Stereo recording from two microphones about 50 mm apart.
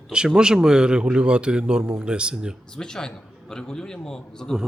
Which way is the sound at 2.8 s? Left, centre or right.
Centre.